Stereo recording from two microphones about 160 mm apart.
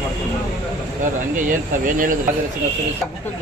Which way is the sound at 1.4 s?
55° right (ahead or behind).